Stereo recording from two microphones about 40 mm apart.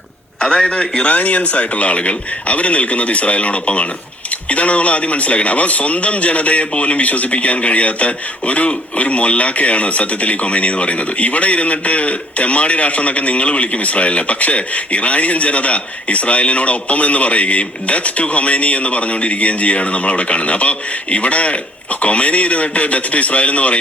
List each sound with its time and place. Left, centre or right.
0.3 s a man's voice: centre; by 23.7 s left